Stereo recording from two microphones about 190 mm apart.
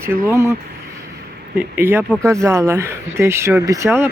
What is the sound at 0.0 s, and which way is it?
Speech, 10° right (ahead or behind).